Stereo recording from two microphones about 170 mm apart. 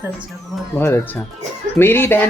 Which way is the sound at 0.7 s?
15° left (ahead or behind).